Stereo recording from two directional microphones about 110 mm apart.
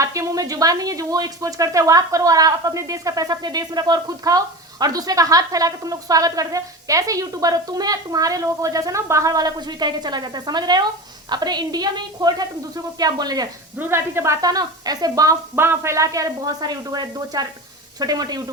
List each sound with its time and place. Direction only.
0.0 s speech: 30° right (ahead or behind)
13.7 s speech: 20° right (ahead or behind)
15.5 s speech: 20° right (ahead or behind); by 18.4 s 35° right (ahead or behind)